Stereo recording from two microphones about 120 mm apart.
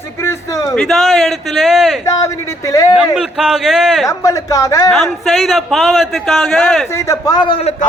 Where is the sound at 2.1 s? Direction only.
25° left (ahead or behind).